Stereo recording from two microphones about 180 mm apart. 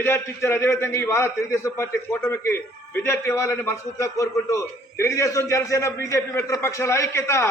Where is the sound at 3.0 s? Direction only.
15° left (ahead or behind).